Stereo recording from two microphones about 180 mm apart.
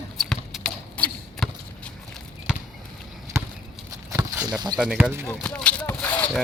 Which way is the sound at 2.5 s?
5° right (ahead or behind).